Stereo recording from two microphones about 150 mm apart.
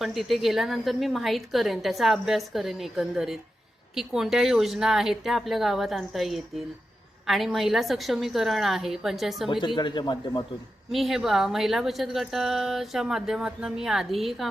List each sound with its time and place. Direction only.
0.0 s speech: centre (ahead or behind)
9.5 s speech: 30° left (ahead or behind)
10.9 s speech: centre (ahead or behind)